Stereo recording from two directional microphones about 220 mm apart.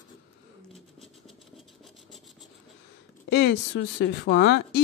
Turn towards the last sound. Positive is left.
turn(degrees=50)  # may be behind; listen again after turning